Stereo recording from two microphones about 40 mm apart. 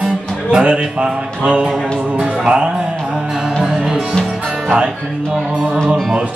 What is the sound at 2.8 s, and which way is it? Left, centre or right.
Music, right.